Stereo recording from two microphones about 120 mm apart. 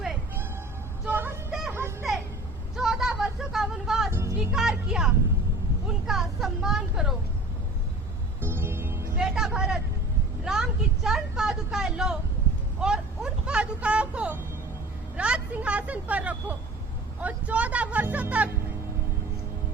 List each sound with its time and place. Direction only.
1.0 s music: 20° right (ahead or behind)
2.7 s a sound: 5° right (ahead or behind)
4.1 s music: 25° right (ahead or behind)
4.4 s music: 5° right (ahead or behind)
5.9 s vehicle: centre (ahead or behind)
8.4 s music: 20° right (ahead or behind)
9.2 s vehicle: 5° right (ahead or behind)
10.4 s a sound: 5° right (ahead or behind)
17.2 s speech: 10° right (ahead or behind)